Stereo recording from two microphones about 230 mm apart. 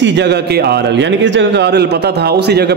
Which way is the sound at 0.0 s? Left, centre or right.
Right.